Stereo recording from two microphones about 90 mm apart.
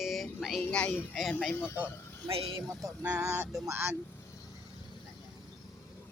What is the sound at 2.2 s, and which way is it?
Speech, 85° right.